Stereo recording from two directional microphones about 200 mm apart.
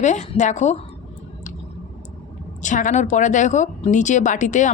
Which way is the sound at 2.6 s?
40° left (ahead or behind).